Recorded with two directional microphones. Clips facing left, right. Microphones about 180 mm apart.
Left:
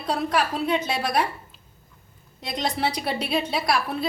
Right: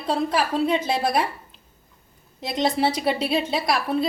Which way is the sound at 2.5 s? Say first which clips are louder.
Right 4 dB; 25° right (ahead or behind).